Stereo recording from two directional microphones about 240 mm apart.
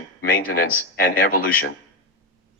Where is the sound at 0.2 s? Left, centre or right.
Left.